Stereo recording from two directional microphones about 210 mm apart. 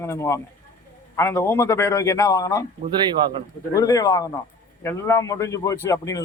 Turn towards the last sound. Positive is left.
turn(degrees=15)  # may be behind; listen again after turning